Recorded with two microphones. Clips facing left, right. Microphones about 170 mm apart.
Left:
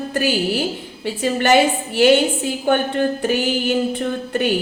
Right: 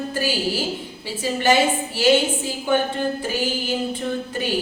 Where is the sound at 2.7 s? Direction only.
65° left (ahead or behind).